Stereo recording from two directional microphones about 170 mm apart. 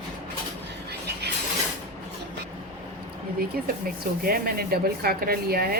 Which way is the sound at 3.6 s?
60° right (ahead or behind).